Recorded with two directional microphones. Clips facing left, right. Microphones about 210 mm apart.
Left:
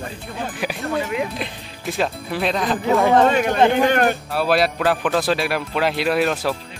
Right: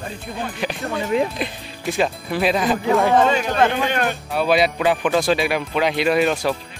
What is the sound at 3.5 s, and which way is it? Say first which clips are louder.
Speech: left 2 dB; 15° left (ahead or behind).